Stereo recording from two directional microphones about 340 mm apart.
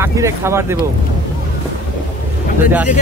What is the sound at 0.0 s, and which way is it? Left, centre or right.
Speech, centre.